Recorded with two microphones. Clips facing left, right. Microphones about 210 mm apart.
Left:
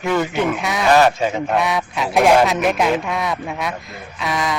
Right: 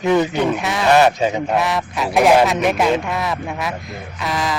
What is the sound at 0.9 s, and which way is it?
Speech, 20° right (ahead or behind).